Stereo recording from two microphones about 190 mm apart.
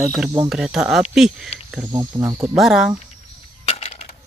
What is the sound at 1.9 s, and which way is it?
Speech, 20° right (ahead or behind).